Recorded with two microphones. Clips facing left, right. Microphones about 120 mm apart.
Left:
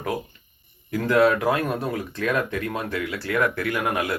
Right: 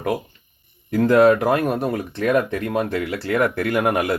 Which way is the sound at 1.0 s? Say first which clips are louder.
Right 5 dB; 25° right (ahead or behind).